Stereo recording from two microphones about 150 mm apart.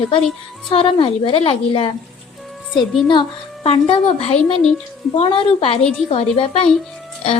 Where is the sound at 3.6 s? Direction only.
40° left (ahead or behind).